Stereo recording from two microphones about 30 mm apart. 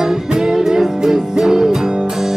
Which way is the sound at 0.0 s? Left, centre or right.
Centre.